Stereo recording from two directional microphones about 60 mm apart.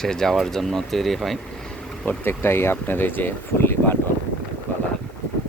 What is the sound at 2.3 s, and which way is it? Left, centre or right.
Speech, left.